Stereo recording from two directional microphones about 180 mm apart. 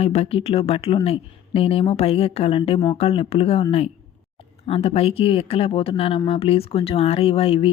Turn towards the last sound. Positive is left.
turn(degrees=30)  # may be behind; listen again after turning